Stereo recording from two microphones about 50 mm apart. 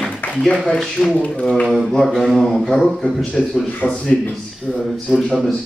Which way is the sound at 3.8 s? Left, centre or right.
Centre.